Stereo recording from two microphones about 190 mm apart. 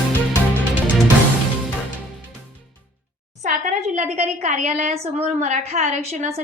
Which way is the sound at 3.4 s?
40° right (ahead or behind).